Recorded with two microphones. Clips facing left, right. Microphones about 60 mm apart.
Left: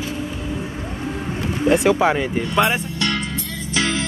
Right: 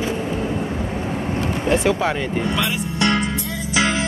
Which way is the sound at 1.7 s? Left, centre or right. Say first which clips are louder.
Left 3 dB; centre.